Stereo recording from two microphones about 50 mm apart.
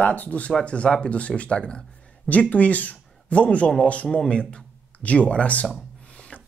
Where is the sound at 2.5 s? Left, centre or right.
Left.